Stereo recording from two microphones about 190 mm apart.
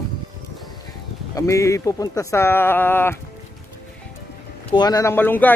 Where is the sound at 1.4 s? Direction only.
15° left (ahead or behind).